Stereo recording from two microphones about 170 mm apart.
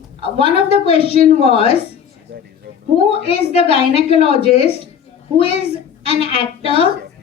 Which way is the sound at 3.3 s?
35° left (ahead or behind).